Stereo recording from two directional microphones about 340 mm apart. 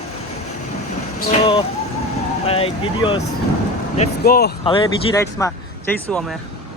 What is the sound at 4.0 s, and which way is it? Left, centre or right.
Speech, left.